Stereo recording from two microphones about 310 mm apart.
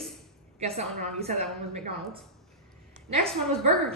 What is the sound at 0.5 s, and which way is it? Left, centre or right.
Speech, right.